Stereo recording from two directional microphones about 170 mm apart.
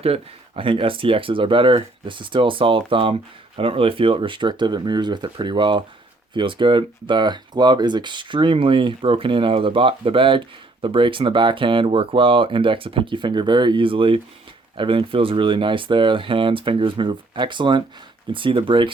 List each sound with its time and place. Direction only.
0.0 s speech: 35° right (ahead or behind)